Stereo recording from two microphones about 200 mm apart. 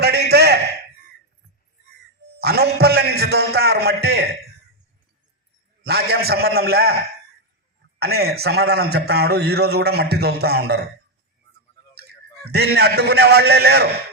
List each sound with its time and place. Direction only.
0.0 s a sound: 55° right (ahead or behind)
2.4 s a man's voice: 55° right (ahead or behind)
5.9 s a man's voice: 50° right (ahead or behind)
7.9 s a man's voice: 50° right (ahead or behind)
12.5 s a man's voice: 55° right (ahead or behind)